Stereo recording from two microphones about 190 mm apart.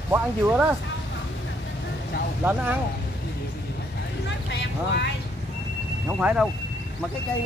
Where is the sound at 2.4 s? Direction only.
10° right (ahead or behind).